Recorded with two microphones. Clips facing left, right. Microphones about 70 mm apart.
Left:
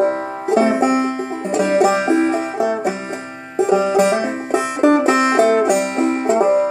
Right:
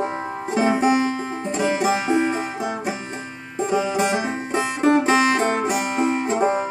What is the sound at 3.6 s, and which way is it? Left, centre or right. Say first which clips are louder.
Banjo: left 7 dB; left.